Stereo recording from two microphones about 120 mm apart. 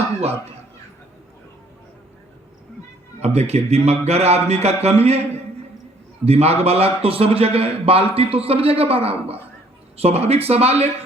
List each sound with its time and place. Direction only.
3.2 s a man's voice: 60° right (ahead or behind)